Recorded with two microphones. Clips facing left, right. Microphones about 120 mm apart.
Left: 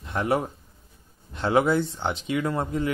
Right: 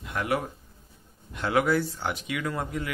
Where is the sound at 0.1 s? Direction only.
30° left (ahead or behind).